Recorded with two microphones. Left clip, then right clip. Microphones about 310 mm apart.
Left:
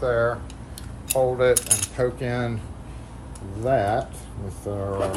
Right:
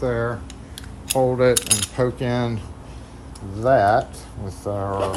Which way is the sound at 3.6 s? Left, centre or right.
Right.